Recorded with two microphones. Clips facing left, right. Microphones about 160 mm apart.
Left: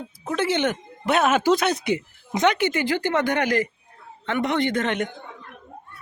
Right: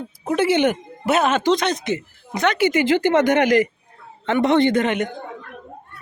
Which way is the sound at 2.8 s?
20° right (ahead or behind).